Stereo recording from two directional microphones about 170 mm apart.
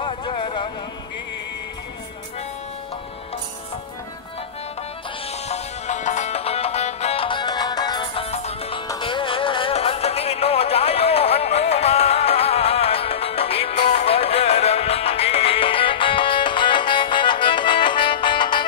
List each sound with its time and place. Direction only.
0.0 s a sound: 30° left (ahead or behind)
5.3 s music: 40° left (ahead or behind)
8.8 s music: 25° left (ahead or behind)